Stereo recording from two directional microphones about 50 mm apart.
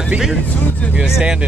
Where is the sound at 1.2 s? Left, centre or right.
Right.